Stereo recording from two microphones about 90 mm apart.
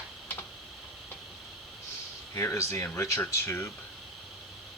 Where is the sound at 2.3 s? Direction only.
30° left (ahead or behind).